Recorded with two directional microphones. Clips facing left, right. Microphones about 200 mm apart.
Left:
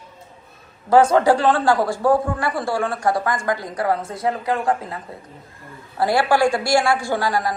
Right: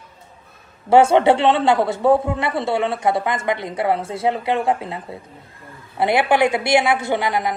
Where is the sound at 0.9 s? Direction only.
25° right (ahead or behind).